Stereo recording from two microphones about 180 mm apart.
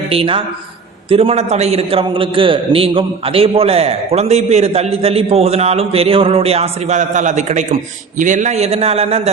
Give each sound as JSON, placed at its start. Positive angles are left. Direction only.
{"t": 0.1, "sound": "a man's voice", "side_deg": -30}